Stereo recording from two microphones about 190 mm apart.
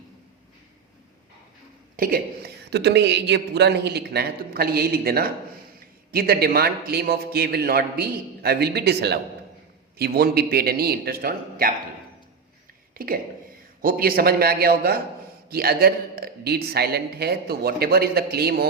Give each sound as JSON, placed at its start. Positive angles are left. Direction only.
{"t": 2.0, "sound": "a man's voice", "side_deg": -50}
{"t": 13.8, "sound": "a man's voice", "side_deg": -50}